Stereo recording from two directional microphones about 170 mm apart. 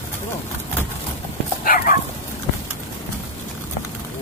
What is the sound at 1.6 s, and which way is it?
Bow-wow, 55° left (ahead or behind).